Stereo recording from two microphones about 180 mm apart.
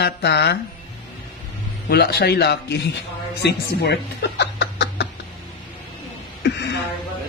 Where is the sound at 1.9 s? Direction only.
60° left (ahead or behind).